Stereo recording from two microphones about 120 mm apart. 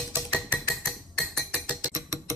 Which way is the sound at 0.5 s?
5° left (ahead or behind).